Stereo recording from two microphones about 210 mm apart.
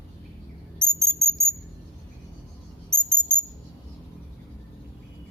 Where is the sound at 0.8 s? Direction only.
Centre (ahead or behind).